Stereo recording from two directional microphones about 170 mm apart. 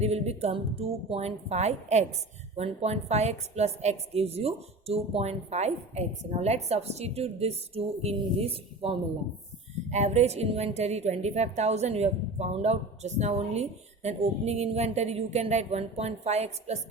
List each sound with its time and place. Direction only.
0.0 s a woman's voice: 40° right (ahead or behind)